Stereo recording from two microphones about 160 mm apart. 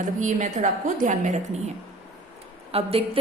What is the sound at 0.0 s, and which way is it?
A woman's voice, 50° right (ahead or behind).